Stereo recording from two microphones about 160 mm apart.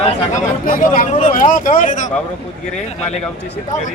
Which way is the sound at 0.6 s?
60° left (ahead or behind).